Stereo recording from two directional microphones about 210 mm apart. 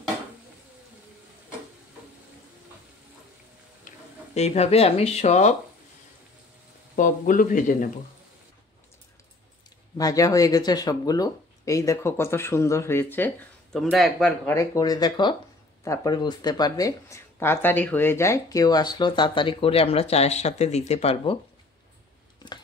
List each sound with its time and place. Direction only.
4.3 s speech: 30° left (ahead or behind)
7.0 s speech: 40° left (ahead or behind)
9.9 s speech: 15° left (ahead or behind); by 14.5 s centre (ahead or behind)
14.5 s speech: 15° left (ahead or behind)